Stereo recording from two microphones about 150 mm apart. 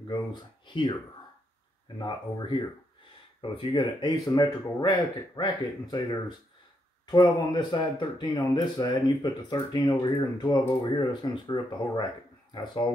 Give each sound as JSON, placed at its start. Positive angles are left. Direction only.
{"t": 0.4, "sound": "speech", "side_deg": 30}
{"t": 2.0, "sound": "speech", "side_deg": 30}